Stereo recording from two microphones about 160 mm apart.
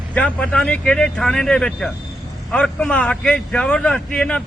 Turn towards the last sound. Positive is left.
turn(degrees=5)  # may be behind; listen again after turning